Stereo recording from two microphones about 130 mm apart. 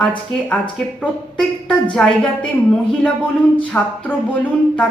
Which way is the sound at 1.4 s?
5° left (ahead or behind).